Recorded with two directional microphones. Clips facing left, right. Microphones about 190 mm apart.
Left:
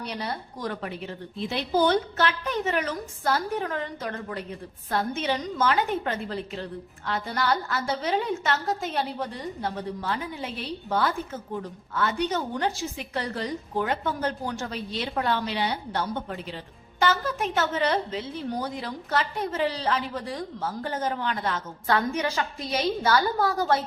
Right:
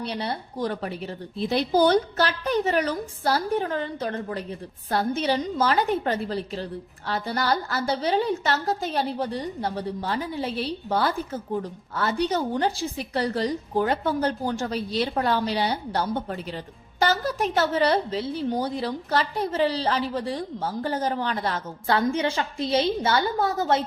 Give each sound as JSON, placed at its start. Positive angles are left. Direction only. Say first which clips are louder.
{"t": 0.0, "sound": "a woman's voice", "louder": "right 3 dB", "side_deg": -30}